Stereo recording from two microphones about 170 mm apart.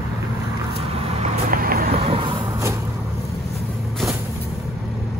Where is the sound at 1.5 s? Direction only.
60° right (ahead or behind).